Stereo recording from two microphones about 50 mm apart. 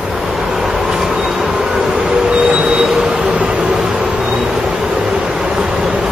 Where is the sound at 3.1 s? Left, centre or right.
Right.